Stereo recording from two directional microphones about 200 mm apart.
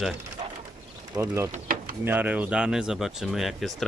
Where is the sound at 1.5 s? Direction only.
45° right (ahead or behind).